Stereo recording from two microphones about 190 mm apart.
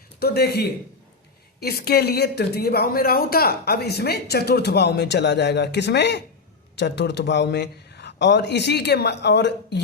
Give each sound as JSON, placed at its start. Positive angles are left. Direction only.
{"t": 0.2, "sound": "speech", "side_deg": 60}